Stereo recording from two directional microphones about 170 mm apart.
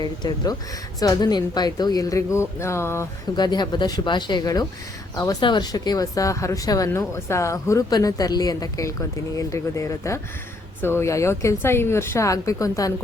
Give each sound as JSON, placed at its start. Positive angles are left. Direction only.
{"t": 0.0, "sound": "speech", "side_deg": 25}